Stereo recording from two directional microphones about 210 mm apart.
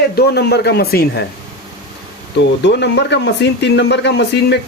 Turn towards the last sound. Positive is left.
turn(degrees=55)  # may be behind; listen again after turning